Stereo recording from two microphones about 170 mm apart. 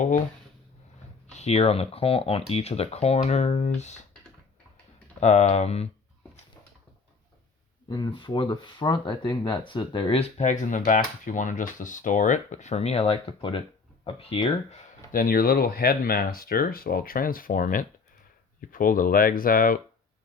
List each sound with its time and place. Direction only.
1.3 s speech: 40° left (ahead or behind)
5.2 s speech: 40° left (ahead or behind)
7.9 s speech: 25° left (ahead or behind)
15.1 s speech: 60° left (ahead or behind)